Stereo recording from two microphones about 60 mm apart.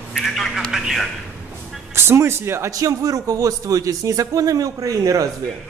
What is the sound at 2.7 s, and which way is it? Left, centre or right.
Speech, right.